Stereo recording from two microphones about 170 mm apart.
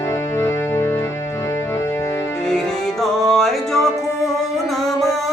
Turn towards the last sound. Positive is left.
turn(degrees=0)  # may be behind; listen again after turning